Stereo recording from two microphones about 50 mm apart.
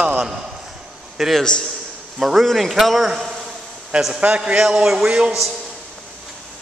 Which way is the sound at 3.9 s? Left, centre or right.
Centre.